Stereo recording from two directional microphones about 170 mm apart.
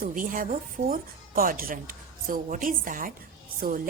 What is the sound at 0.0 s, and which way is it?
A woman's voice, 55° right (ahead or behind).